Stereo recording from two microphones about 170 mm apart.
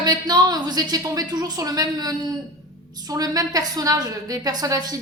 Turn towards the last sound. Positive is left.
turn(degrees=-20)  # may be behind; listen again after turning